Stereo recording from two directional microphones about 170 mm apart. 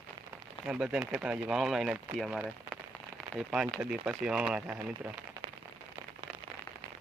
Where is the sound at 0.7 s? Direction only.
5° right (ahead or behind).